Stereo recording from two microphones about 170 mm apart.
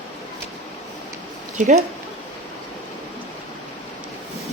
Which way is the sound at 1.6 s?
40° right (ahead or behind).